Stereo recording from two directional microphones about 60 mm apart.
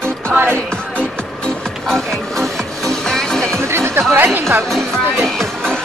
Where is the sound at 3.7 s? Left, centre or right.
Right.